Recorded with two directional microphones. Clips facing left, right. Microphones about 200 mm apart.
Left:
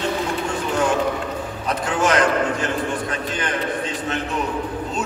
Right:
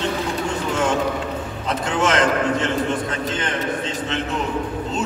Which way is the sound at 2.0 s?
25° right (ahead or behind).